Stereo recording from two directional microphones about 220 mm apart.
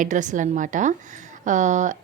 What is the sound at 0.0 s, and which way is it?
A woman's voice, 35° right (ahead or behind).